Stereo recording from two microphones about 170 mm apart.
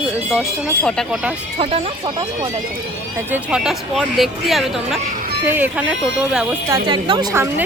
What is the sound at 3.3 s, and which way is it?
A woman's voice, 5° right (ahead or behind).